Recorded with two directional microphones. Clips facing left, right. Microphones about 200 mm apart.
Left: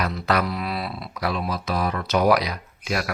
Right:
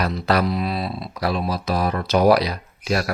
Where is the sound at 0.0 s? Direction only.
35° right (ahead or behind).